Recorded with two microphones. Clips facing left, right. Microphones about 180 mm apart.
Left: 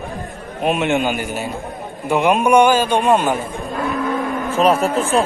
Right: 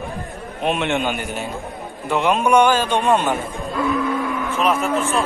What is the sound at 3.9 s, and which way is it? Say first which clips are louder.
Cattle: left 2 dB; 45° left (ahead or behind).